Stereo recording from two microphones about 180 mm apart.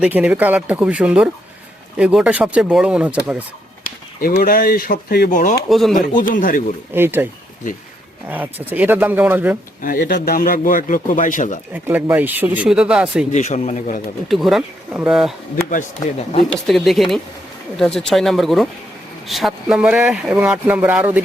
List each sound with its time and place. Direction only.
0.0 s speech: 5° right (ahead or behind)
3.8 s speech: 50° left (ahead or behind)
5.6 s speech: centre (ahead or behind)
6.1 s a man's voice: 50° left (ahead or behind)
6.9 s speech: 10° right (ahead or behind)
8.3 s speech: 10° right (ahead or behind)
9.8 s a man's voice: 50° left (ahead or behind)
11.7 s speech: 10° right (ahead or behind)
13.3 s a man's voice: 40° left (ahead or behind)
14.3 s speech: centre (ahead or behind)
16.0 s speech: 35° left (ahead or behind)
16.5 s speech: centre (ahead or behind)